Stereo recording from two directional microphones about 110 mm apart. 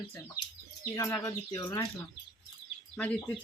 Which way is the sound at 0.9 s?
30° left (ahead or behind).